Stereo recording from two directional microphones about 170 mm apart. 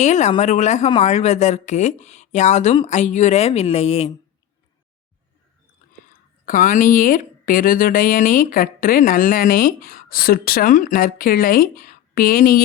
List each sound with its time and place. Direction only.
0.0 s a woman's voice: 45° left (ahead or behind)
6.4 s speech: 50° left (ahead or behind)